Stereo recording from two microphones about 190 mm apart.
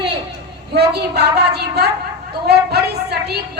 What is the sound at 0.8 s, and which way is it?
A woman's voice, 60° right (ahead or behind).